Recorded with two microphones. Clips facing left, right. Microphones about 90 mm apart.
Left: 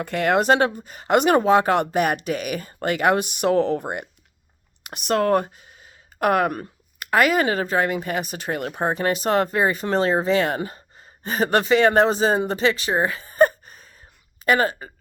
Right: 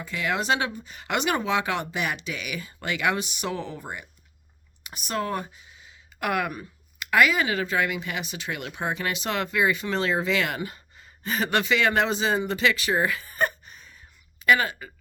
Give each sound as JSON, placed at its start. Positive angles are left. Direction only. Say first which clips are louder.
{"t": 0.0, "sound": "speech", "louder": "left 8 dB", "side_deg": 55}